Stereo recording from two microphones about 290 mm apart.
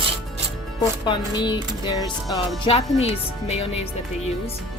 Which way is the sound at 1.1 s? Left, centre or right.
Centre.